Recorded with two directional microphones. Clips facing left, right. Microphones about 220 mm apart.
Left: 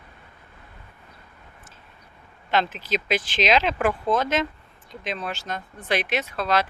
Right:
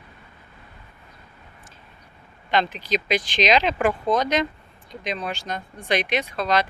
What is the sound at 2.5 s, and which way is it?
Speech, 5° left (ahead or behind).